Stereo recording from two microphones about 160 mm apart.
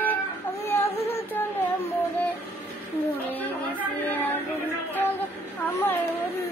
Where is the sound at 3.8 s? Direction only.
10° left (ahead or behind).